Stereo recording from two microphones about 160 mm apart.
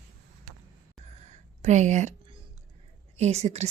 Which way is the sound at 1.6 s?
45° right (ahead or behind).